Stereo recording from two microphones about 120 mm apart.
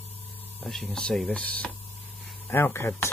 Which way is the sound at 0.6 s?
Centre (ahead or behind).